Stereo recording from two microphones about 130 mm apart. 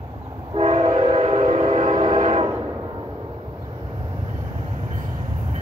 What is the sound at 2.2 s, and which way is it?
Train, 65° right (ahead or behind).